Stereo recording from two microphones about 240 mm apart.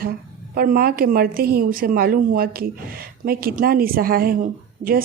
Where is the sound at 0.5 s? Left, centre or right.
Right.